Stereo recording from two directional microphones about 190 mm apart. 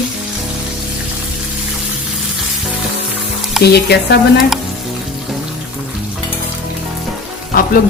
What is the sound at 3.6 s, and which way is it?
Speech, centre (ahead or behind).